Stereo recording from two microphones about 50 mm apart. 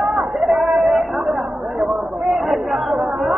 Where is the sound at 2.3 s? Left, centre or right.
Centre.